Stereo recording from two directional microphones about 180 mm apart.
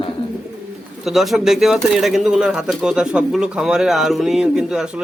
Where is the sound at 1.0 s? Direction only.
Centre (ahead or behind).